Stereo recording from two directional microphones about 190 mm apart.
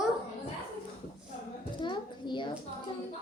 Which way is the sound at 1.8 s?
25° left (ahead or behind).